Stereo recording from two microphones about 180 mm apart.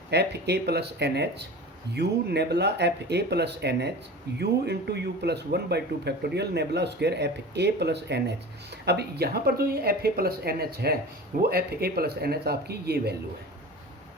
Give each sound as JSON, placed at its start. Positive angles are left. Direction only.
{"t": 0.1, "sound": "speech", "side_deg": -65}